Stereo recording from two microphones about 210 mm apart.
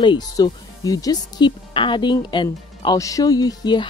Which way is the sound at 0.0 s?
20° left (ahead or behind).